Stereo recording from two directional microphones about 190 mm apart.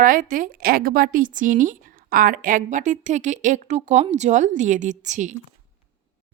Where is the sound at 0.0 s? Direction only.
45° right (ahead or behind).